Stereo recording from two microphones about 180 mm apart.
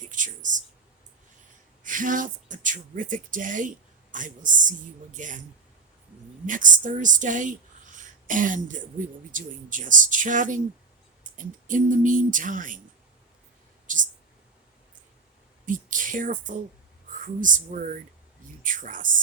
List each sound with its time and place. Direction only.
0.1 s speech: 45° right (ahead or behind)
1.8 s speech: 45° right (ahead or behind)
6.4 s speech: 45° right (ahead or behind)
7.9 s throat clearing: 45° right (ahead or behind)
9.3 s speech: 45° right (ahead or behind)
13.8 s a sound: 45° right (ahead or behind)
15.6 s speech: 45° right (ahead or behind)